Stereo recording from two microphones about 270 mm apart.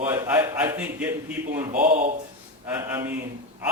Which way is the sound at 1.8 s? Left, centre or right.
Right.